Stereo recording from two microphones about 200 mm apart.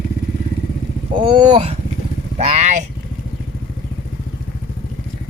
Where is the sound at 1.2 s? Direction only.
20° right (ahead or behind).